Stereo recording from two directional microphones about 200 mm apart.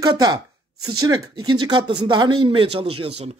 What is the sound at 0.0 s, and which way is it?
A man's voice, 20° right (ahead or behind).